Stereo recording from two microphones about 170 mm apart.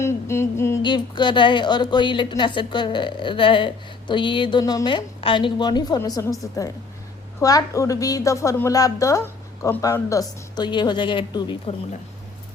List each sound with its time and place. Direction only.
0.0 s humming: 15° left (ahead or behind)
0.8 s a woman's voice: 25° left (ahead or behind)